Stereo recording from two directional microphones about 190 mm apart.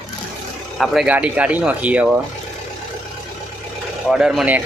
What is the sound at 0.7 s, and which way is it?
Speech, centre (ahead or behind).